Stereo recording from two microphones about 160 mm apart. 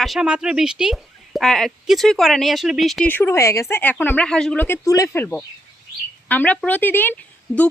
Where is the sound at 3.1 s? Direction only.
15° left (ahead or behind).